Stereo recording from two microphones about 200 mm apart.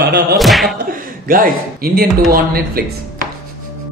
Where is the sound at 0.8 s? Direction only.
45° right (ahead or behind).